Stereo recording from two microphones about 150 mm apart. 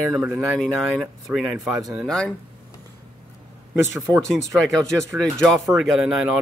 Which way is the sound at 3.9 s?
20° right (ahead or behind).